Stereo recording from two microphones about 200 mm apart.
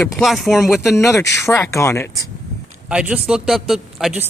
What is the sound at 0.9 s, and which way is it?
Speech, 15° left (ahead or behind).